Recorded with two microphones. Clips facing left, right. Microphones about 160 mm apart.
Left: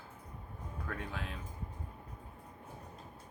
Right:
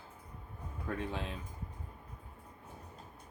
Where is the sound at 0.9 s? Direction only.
25° right (ahead or behind).